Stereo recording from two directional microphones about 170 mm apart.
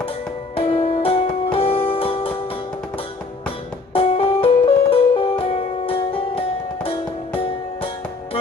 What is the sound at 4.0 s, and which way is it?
Music, 35° left (ahead or behind).